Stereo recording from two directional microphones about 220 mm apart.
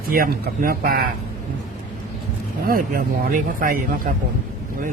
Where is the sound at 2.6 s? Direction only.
40° right (ahead or behind).